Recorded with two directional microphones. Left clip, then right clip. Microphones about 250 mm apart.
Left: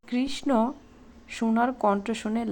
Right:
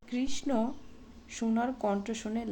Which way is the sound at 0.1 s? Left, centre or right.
Centre.